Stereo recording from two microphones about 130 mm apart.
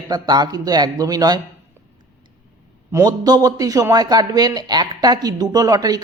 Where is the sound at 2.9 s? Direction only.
30° right (ahead or behind).